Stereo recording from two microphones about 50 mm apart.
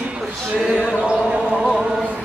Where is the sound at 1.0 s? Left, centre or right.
Centre.